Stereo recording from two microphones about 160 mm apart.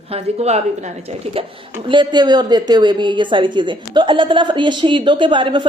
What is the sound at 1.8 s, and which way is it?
A woman's voice, 30° right (ahead or behind).